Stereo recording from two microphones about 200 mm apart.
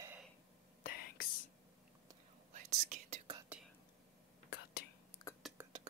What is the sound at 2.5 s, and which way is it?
Whispering, 35° right (ahead or behind).